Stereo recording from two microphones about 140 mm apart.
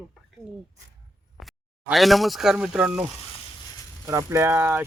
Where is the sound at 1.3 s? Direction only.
Centre (ahead or behind).